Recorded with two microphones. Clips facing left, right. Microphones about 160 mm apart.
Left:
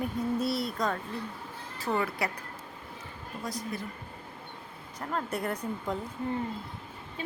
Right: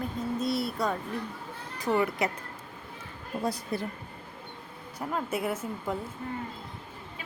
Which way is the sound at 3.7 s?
30° right (ahead or behind).